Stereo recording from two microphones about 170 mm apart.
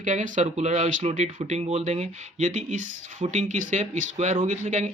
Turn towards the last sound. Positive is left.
turn(degrees=-45)  # may be behind; listen again after turning